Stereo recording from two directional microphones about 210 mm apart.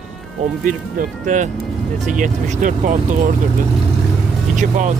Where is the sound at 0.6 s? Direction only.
40° right (ahead or behind).